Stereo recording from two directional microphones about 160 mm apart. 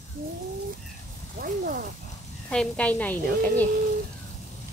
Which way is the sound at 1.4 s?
65° right (ahead or behind).